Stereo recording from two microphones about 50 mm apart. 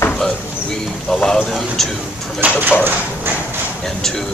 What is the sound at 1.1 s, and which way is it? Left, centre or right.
Speech, centre.